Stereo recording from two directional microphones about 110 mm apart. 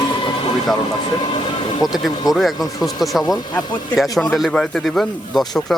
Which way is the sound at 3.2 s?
35° left (ahead or behind).